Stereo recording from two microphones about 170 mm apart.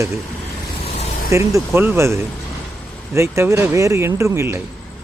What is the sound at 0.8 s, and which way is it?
Vehicle, 40° left (ahead or behind).